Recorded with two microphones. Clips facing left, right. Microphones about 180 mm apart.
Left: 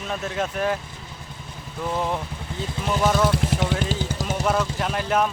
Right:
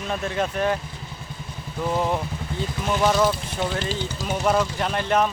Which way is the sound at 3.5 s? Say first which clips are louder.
Left 2 dB; 90° left.